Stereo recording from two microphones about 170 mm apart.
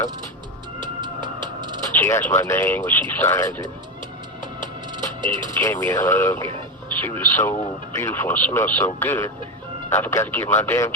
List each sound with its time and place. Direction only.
0.8 s music: 25° right (ahead or behind)
1.9 s speech: 15° left (ahead or behind)
4.6 s music: 25° right (ahead or behind)
5.5 s speech: 20° left (ahead or behind)